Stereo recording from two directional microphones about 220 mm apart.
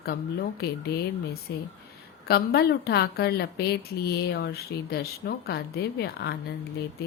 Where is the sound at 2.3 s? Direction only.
45° left (ahead or behind).